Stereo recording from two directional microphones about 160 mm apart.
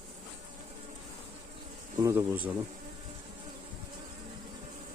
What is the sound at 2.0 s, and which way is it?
Speech, 20° right (ahead or behind).